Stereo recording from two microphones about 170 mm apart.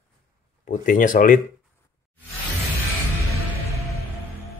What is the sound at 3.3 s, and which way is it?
Music, 20° left (ahead or behind).